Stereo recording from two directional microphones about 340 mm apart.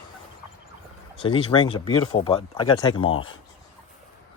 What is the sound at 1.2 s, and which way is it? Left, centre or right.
Speech, centre.